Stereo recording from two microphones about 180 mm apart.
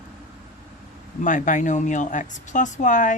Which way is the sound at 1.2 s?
45° left (ahead or behind).